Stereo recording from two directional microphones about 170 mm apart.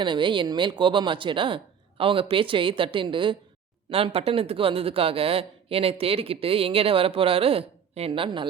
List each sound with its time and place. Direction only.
0.0 s a woman's voice: 30° right (ahead or behind)